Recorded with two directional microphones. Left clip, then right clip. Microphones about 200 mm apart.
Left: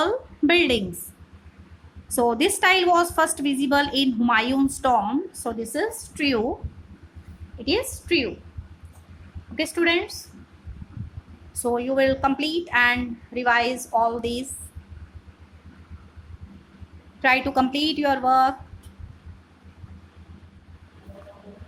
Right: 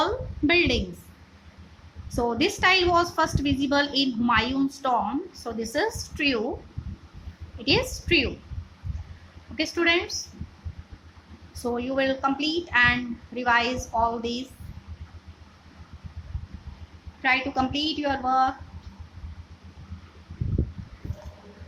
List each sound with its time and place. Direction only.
0.0 s a sound: 20° left (ahead or behind)
2.1 s a woman's voice: 20° left (ahead or behind)
5.5 s a woman's voice: 5° left (ahead or behind)
7.6 s a woman's voice: 10° left (ahead or behind)
9.7 s a woman's voice: 15° left (ahead or behind)
11.6 s a woman's voice: 15° left (ahead or behind)
17.2 s a woman's voice: 25° left (ahead or behind)